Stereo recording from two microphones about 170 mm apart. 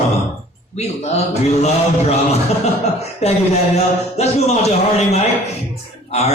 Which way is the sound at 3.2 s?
40° left (ahead or behind).